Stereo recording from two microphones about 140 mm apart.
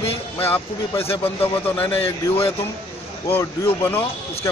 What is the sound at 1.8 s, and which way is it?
Speech, 40° left (ahead or behind).